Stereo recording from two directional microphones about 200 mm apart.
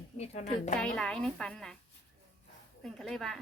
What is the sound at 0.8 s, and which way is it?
Speech, 5° left (ahead or behind).